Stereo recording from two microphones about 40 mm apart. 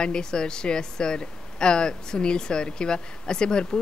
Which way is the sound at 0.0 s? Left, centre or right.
Centre.